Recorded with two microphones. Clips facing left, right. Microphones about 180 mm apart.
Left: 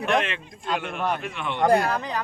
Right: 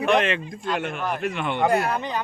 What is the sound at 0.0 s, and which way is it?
Speech, centre (ahead or behind).